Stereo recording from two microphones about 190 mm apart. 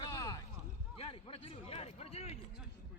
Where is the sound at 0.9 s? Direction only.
30° left (ahead or behind).